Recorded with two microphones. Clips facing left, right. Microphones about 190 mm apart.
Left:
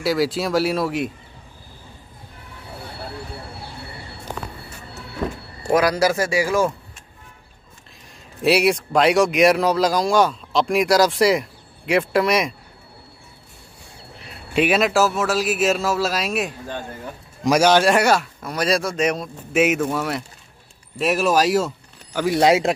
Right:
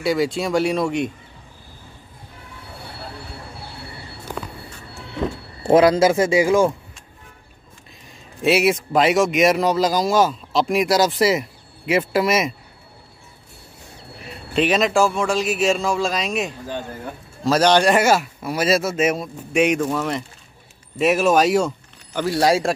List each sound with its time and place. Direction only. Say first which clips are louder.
0.0 s speech: even; centre (ahead or behind)
5.7 s speech: right 4 dB; 25° right (ahead or behind)
8.4 s speech: even; centre (ahead or behind)
14.5 s speech: even; 10° left (ahead or behind)
22.2 s speech: left 2 dB; 20° left (ahead or behind)